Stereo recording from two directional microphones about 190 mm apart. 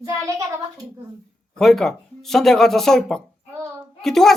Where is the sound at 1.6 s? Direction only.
Centre (ahead or behind).